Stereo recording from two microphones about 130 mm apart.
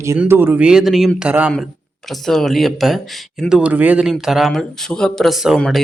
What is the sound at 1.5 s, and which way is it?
A man's voice, centre (ahead or behind).